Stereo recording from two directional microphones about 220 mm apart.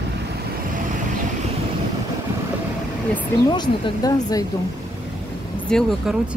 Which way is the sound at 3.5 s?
20° left (ahead or behind).